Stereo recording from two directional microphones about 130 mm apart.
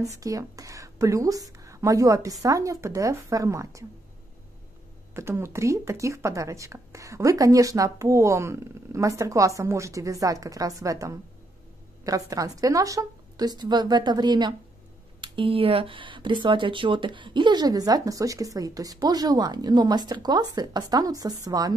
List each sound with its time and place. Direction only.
0.2 s speech: 25° right (ahead or behind)
5.1 s speech: 20° right (ahead or behind)